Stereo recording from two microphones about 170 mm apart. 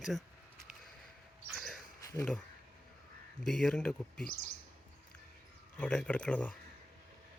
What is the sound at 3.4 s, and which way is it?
Speech, centre (ahead or behind).